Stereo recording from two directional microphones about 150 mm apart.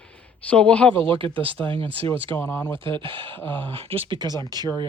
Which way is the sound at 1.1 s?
35° right (ahead or behind).